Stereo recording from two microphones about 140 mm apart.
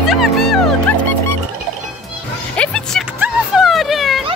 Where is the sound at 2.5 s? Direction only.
10° left (ahead or behind).